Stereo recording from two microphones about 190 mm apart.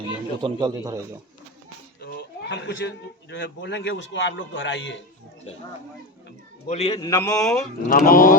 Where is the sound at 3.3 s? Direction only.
65° left (ahead or behind).